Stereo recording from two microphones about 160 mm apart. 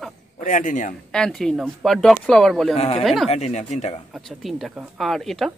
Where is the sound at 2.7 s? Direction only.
40° left (ahead or behind).